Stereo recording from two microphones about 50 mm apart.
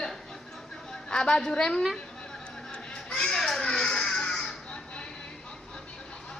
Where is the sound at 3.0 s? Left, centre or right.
Centre.